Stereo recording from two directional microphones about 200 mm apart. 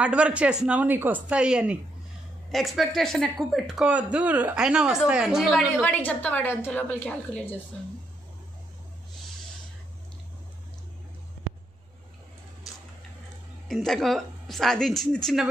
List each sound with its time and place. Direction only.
0.0 s a woman's voice: 5° right (ahead or behind)
13.7 s speech: centre (ahead or behind)